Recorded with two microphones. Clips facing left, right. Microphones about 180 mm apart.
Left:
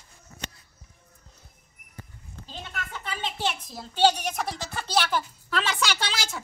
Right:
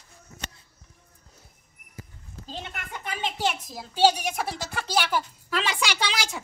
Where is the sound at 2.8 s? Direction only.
15° right (ahead or behind).